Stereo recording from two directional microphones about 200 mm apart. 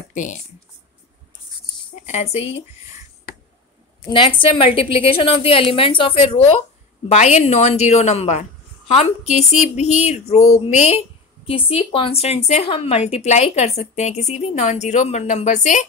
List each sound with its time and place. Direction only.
0.1 s speech: 40° left (ahead or behind)
2.0 s a woman's voice: 35° left (ahead or behind)
4.1 s a woman's voice: 25° left (ahead or behind)